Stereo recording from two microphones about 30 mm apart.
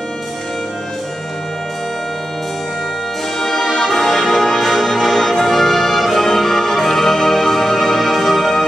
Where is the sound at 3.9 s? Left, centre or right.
Centre.